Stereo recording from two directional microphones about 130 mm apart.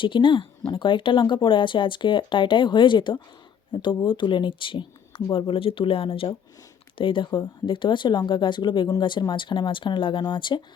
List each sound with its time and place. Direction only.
0.0 s speech: 40° left (ahead or behind)